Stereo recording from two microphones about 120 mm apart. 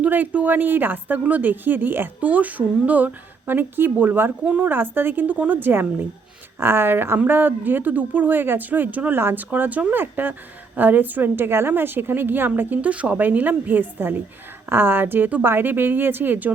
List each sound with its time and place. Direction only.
0.0 s a woman's voice: 15° right (ahead or behind)